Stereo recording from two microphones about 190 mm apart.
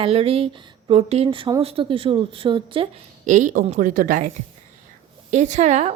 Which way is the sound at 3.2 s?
40° right (ahead or behind).